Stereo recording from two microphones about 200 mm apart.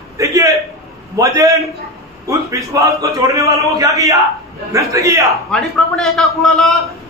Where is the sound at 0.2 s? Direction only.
15° right (ahead or behind).